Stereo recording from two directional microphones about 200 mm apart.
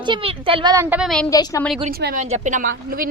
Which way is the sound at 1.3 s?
15° left (ahead or behind).